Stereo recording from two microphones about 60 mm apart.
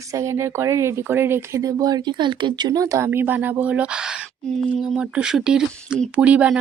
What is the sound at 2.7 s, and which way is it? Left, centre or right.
Speech, right.